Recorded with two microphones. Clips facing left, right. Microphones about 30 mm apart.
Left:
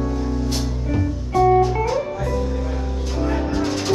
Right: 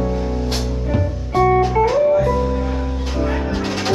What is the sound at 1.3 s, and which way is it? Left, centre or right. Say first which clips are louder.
Music: even; right.